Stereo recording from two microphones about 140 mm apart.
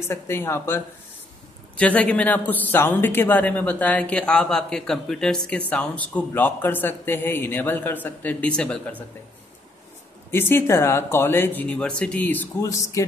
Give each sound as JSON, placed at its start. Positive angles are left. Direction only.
{"t": 0.1, "sound": "a man's voice", "side_deg": 15}
{"t": 10.3, "sound": "a man's voice", "side_deg": 15}